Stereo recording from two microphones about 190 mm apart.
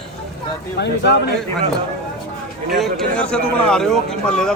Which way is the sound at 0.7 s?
60° left (ahead or behind).